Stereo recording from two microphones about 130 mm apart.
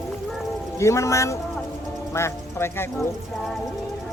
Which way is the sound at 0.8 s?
20° left (ahead or behind).